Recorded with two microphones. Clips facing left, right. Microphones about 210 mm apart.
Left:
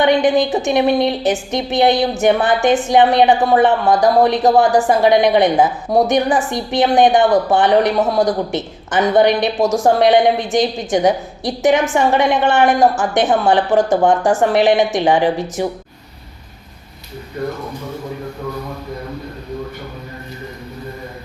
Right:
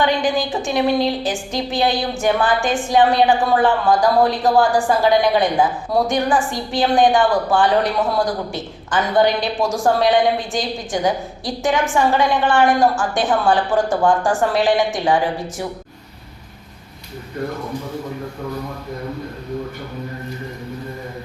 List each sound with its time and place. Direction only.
0.0 s a woman's voice: 20° left (ahead or behind)